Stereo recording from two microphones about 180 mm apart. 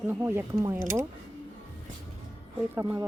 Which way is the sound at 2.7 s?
15° right (ahead or behind).